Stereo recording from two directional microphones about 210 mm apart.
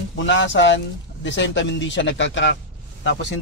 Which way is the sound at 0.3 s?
60° left (ahead or behind).